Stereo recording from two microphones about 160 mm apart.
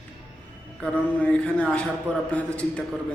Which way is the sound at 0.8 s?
5° left (ahead or behind).